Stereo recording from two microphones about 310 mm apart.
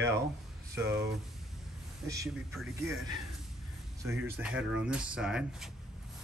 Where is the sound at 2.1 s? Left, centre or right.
Centre.